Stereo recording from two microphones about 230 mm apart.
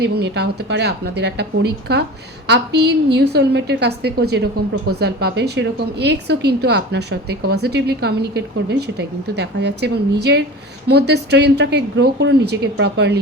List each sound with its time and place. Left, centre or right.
0.0 s a woman's voice: right